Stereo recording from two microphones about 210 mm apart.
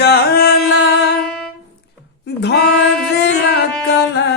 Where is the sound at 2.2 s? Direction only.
50° left (ahead or behind).